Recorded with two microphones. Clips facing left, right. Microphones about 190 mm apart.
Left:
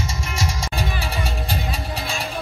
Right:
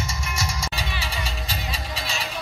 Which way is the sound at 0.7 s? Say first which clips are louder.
Left 5 dB; 55° left (ahead or behind).